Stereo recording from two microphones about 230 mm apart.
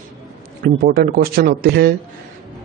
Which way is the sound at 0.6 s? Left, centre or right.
Right.